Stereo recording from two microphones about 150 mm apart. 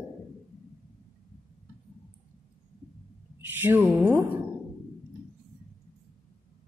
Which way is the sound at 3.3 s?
15° right (ahead or behind).